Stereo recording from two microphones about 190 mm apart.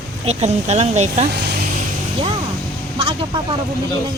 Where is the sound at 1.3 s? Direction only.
60° right (ahead or behind).